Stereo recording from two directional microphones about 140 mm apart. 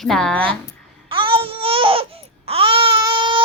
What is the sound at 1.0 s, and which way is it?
Babbling, 40° right (ahead or behind).